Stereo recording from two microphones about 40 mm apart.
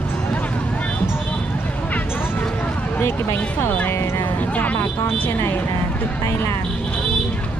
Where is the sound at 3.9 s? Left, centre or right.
Left.